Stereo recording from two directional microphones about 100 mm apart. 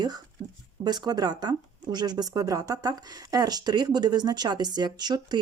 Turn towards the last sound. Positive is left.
turn(degrees=-45)  # may be behind; listen again after turning